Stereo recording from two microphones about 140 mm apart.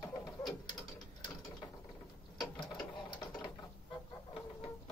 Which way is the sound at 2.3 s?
30° left (ahead or behind).